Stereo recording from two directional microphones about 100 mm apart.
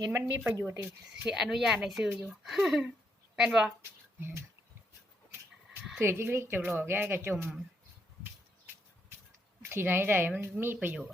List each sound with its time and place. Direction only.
0.2 s a woman's voice: 20° right (ahead or behind)
1.3 s speech: 5° right (ahead or behind)
4.2 s a woman's voice: 20° right (ahead or behind)
6.0 s a woman's voice: 25° right (ahead or behind)
8.2 s a sound: 20° right (ahead or behind)
9.6 s a woman's voice: 20° right (ahead or behind)